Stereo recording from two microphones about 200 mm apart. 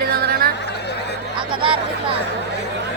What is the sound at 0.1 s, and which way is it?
Chatter, 50° right (ahead or behind).